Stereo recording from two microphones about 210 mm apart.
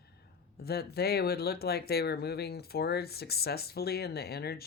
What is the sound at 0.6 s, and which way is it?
Speech, 50° left (ahead or behind).